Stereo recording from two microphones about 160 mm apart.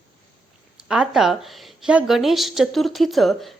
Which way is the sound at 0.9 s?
Centre (ahead or behind).